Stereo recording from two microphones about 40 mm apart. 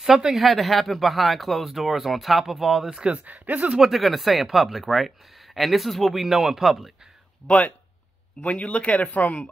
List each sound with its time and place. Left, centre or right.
0.0 s speech: centre
3.3 s speech: right
3.8 s speech: centre
6.2 s speech: centre
7.4 s speech: left